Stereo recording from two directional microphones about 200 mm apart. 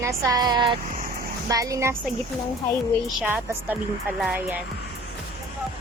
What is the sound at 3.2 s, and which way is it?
Speech, 10° right (ahead or behind).